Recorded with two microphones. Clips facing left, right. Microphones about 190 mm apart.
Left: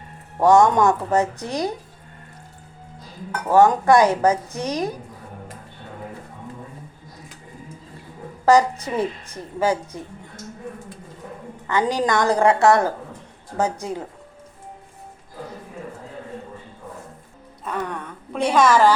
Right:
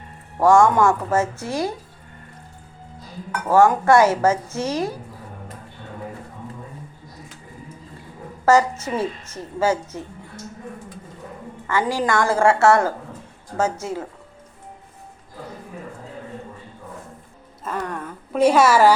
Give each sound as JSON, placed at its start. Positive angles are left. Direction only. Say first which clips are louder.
{"t": 0.4, "sound": "speech", "louder": "even", "side_deg": 20}
{"t": 3.5, "sound": "a woman's voice", "louder": "even", "side_deg": 20}
{"t": 8.4, "sound": "a woman's voice", "louder": "left 1 dB", "side_deg": 15}
{"t": 11.7, "sound": "a woman's voice", "louder": "left 1 dB", "side_deg": 20}
{"t": 17.6, "sound": "a woman's voice", "louder": "even", "side_deg": 0}